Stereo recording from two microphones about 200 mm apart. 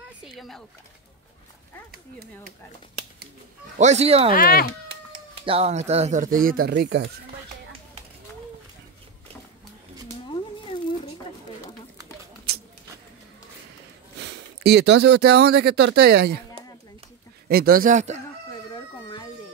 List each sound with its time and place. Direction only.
0.2 s a sound: centre (ahead or behind)
1.9 s speech: 50° right (ahead or behind)
3.7 s speech: 35° right (ahead or behind)
4.4 s speech: 50° left (ahead or behind)
5.3 s speech: 25° right (ahead or behind); by 7.1 s 60° right (ahead or behind)
10.2 s a sound: 25° left (ahead or behind)
12.5 s a sound: 50° right (ahead or behind)
14.2 s speech: 55° right (ahead or behind)
17.5 s speech: 50° right (ahead or behind)
18.7 s chicken: 20° left (ahead or behind)